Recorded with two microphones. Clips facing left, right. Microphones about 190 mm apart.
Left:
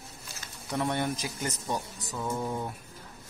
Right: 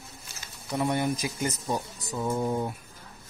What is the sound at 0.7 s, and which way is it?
Speech, 10° right (ahead or behind).